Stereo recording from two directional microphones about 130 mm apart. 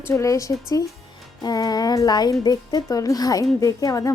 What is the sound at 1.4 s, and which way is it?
Music, 30° left (ahead or behind).